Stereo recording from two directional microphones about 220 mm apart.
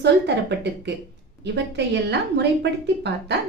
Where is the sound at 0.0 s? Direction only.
50° right (ahead or behind).